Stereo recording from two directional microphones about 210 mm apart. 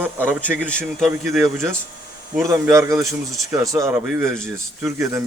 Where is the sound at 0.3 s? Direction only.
10° right (ahead or behind).